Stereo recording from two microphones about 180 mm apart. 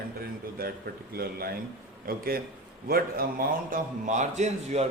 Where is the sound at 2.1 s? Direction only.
55° right (ahead or behind).